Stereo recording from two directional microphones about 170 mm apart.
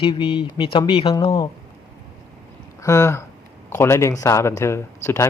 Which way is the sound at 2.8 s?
15° left (ahead or behind).